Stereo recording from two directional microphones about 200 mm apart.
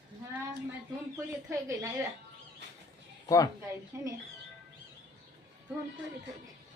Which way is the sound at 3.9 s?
10° right (ahead or behind).